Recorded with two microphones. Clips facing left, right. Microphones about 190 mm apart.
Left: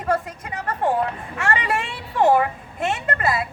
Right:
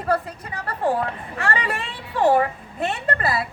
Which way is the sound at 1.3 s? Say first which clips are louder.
Left 2 dB; 35° right (ahead or behind).